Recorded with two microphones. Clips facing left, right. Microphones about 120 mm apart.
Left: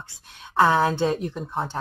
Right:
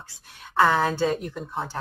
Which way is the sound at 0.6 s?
20° left (ahead or behind).